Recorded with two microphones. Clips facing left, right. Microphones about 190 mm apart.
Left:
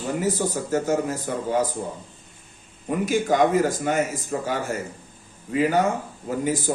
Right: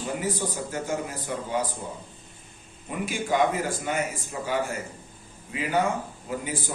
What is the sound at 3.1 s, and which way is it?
Speech, 45° left (ahead or behind).